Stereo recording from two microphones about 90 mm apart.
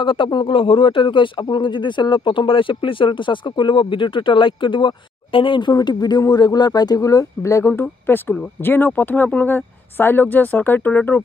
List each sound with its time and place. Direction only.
0.0 s speech: 70° left (ahead or behind); by 11.1 s 15° left (ahead or behind)